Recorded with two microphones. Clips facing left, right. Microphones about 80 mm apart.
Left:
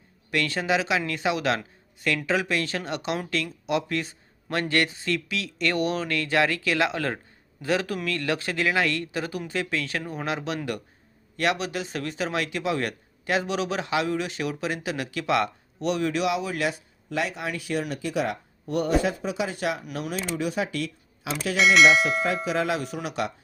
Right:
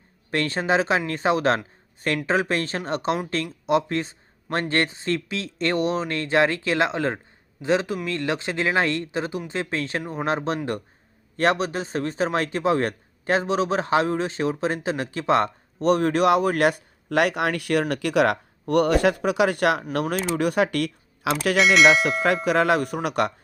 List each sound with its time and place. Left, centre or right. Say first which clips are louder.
0.3 s a man's voice: right 2 dB; right
21.6 s speech: right 1 dB; centre
22.4 s speech: right 6 dB; right